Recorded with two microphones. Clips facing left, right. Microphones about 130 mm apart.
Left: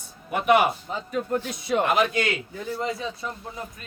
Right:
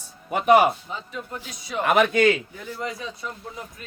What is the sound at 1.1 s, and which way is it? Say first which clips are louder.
Speech: left 8 dB; 55° left (ahead or behind).